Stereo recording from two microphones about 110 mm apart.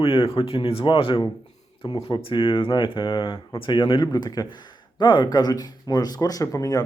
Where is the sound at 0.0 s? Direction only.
55° left (ahead or behind).